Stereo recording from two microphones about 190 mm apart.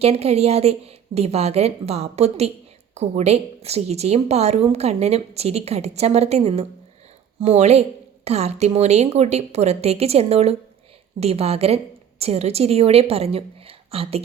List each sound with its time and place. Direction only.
0.0 s a woman's voice: 35° right (ahead or behind)